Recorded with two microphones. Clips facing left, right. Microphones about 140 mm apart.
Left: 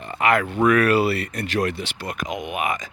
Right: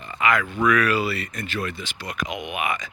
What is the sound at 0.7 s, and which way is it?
Speech, 55° left (ahead or behind).